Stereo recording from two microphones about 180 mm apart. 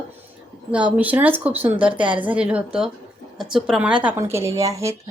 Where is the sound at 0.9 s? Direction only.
10° right (ahead or behind).